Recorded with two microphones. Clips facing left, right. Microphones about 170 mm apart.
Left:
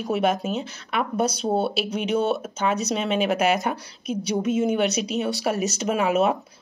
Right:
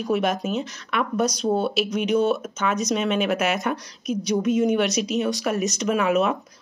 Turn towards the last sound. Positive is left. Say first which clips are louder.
# even
turn(degrees=35)  # may be behind; listen again after turning